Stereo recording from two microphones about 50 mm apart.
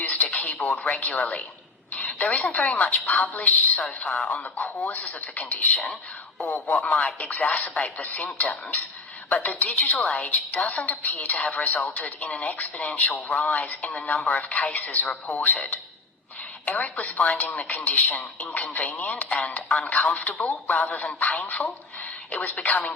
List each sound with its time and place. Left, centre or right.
0.0 s radio: left
1.9 s a woman's voice: left
16.6 s a woman's voice: left